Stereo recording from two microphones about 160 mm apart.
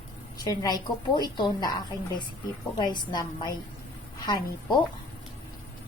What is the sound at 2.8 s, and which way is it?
Speech, 30° left (ahead or behind).